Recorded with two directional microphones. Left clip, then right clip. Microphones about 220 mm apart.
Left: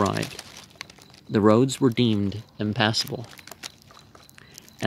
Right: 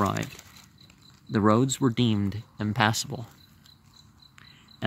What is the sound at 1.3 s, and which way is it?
Speech, 20° right (ahead or behind).